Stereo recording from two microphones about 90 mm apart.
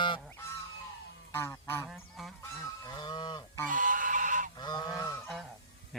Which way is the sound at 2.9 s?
55° left (ahead or behind).